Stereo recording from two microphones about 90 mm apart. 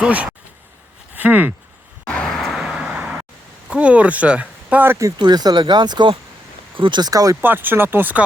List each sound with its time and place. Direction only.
0.0 s speech: 10° right (ahead or behind)
2.0 s vehicle: 10° left (ahead or behind); by 3.0 s 10° right (ahead or behind)
3.7 s speech: 15° right (ahead or behind)
5.1 s speech: 50° right (ahead or behind)
6.7 s speech: 70° right (ahead or behind)
7.0 s speech: 40° right (ahead or behind)
7.4 s speech: 20° right (ahead or behind)